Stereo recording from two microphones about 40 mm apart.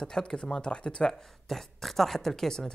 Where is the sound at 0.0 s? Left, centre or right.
Centre.